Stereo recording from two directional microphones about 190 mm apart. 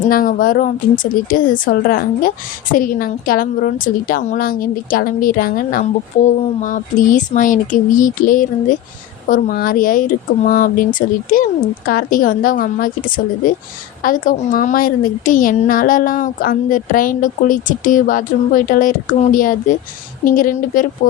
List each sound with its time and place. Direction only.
0.1 s a woman's voice: 45° left (ahead or behind)